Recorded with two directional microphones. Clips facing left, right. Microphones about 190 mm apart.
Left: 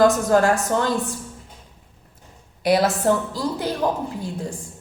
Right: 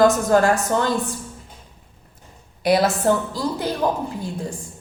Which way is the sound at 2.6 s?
5° left (ahead or behind).